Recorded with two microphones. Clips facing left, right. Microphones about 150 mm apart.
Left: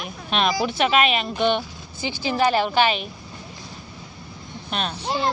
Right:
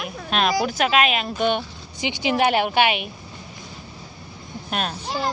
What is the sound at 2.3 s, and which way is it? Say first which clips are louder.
Speech: left 1 dB; 60° right (ahead or behind).